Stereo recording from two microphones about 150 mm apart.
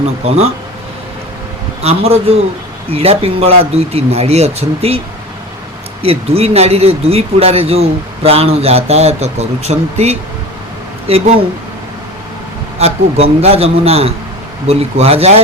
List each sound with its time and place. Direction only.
1.8 s speech: 45° right (ahead or behind)
6.0 s speech: 40° right (ahead or behind)
12.8 s speech: 45° right (ahead or behind)